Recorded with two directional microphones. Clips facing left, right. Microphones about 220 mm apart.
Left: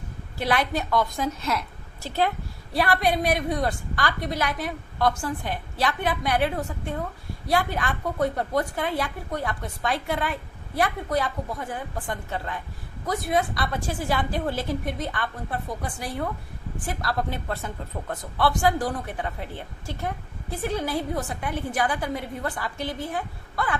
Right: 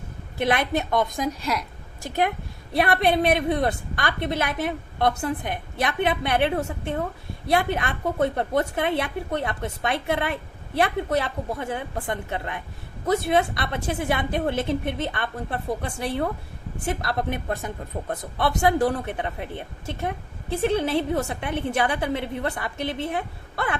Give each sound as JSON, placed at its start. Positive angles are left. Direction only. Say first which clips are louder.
{"t": 0.3, "sound": "a woman's voice", "louder": "right 2 dB", "side_deg": -20}